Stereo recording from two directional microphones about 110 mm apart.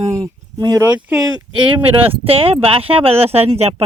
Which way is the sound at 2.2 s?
60° right (ahead or behind).